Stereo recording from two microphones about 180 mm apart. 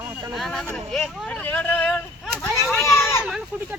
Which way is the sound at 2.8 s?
15° left (ahead or behind).